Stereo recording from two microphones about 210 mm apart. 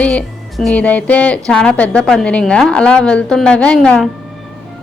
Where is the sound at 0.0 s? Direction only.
5° left (ahead or behind).